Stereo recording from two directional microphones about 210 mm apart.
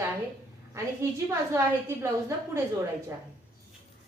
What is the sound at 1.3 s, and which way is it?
A woman's voice, 15° right (ahead or behind).